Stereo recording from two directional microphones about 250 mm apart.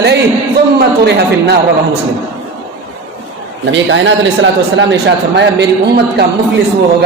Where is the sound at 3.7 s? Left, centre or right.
Right.